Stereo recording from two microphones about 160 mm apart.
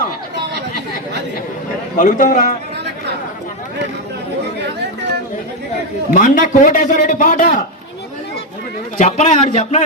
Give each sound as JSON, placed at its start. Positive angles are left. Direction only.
{"t": 2.0, "sound": "a man's voice", "side_deg": 50}
{"t": 6.1, "sound": "a man's voice", "side_deg": 55}
{"t": 9.0, "sound": "a man's voice", "side_deg": 45}